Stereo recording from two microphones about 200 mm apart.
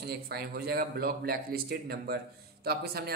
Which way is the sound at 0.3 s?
50° right (ahead or behind).